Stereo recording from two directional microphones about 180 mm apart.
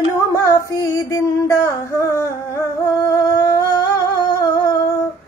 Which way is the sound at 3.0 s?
15° left (ahead or behind).